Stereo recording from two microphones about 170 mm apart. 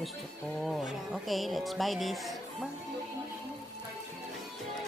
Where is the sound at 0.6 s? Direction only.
Centre (ahead or behind).